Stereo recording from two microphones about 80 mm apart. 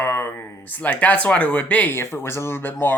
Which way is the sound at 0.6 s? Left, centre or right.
Centre.